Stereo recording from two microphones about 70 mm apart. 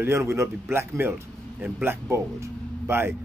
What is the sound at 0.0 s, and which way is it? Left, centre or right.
Speech, right.